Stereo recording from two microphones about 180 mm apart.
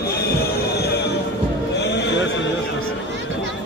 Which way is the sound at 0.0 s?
60° left (ahead or behind).